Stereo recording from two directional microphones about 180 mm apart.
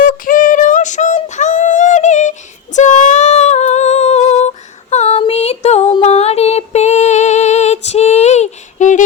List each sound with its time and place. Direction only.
0.0 s female singing: 50° left (ahead or behind)